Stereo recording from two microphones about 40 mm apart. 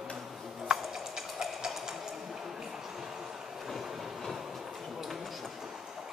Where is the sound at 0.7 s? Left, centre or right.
Centre.